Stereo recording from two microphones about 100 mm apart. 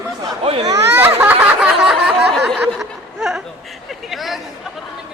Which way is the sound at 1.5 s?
5° right (ahead or behind).